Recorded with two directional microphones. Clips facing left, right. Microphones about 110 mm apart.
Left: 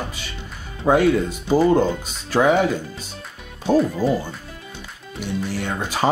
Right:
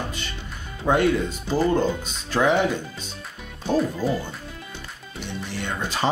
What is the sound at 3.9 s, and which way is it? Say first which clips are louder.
Speech: left 4 dB; 10° left (ahead or behind).